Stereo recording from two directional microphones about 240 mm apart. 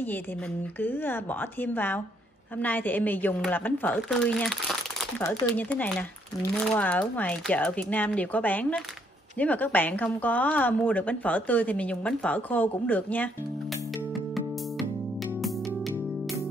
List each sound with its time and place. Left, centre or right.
0.7 s a woman's voice: centre
15.4 s music: centre